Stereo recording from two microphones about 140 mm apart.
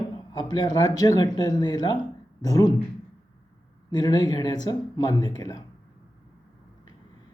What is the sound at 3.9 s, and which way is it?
Speech, 30° left (ahead or behind).